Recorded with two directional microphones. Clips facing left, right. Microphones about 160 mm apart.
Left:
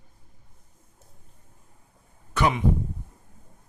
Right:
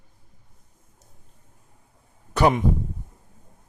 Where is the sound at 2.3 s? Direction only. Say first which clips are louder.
Right 5 dB; 40° right (ahead or behind).